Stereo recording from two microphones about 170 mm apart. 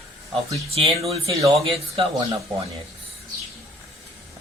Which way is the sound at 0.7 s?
35° right (ahead or behind).